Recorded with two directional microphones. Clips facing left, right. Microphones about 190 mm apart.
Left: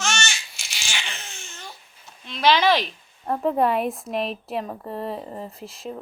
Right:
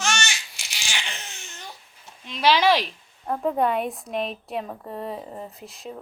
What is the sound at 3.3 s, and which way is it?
A woman's voice, centre (ahead or behind).